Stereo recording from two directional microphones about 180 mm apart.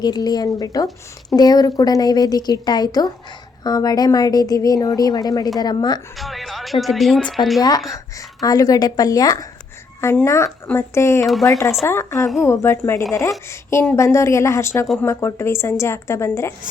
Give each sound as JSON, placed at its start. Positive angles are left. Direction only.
{"t": 0.0, "sound": "a woman's voice", "side_deg": 20}
{"t": 6.1, "sound": "speech", "side_deg": 0}
{"t": 7.9, "sound": "a woman's voice", "side_deg": 20}